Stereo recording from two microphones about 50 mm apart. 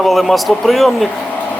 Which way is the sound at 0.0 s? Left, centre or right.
Centre.